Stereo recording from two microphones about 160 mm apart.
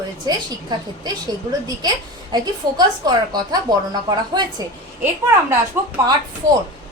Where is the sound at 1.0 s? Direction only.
25° right (ahead or behind).